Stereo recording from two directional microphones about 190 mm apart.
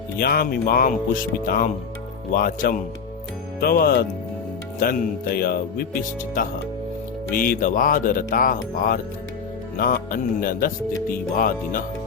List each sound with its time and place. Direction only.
0.2 s speech: 55° left (ahead or behind)